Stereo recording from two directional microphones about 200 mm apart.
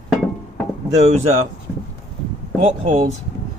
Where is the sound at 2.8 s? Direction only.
35° right (ahead or behind).